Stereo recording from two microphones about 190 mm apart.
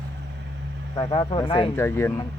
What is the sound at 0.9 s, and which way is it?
Speech, 25° left (ahead or behind).